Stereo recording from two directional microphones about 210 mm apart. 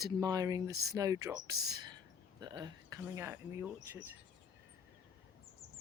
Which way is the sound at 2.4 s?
20° right (ahead or behind).